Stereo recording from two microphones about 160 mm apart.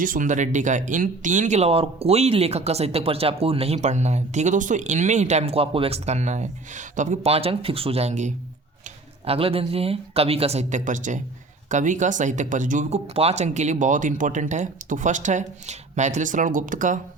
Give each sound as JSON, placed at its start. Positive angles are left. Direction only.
{"t": 0.0, "sound": "speech", "side_deg": -55}